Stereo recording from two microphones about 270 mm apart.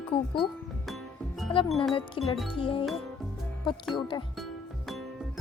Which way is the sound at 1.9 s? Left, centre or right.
Left.